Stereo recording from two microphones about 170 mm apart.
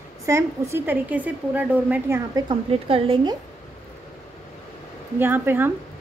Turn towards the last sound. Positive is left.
turn(degrees=-10)  # may be behind; listen again after turning